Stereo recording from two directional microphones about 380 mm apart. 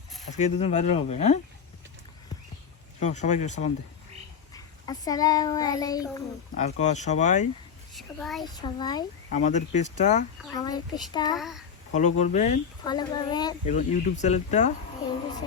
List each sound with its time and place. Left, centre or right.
0.3 s speech: centre
3.0 s a child's voice: centre
7.9 s a child's voice: centre
8.4 s speech: centre
11.3 s a child's voice: centre
11.9 s speech: centre